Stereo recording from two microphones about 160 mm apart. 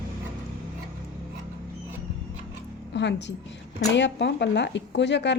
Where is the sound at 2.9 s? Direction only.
90° left.